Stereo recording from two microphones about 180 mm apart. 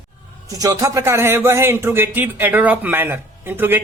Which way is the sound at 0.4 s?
20° right (ahead or behind).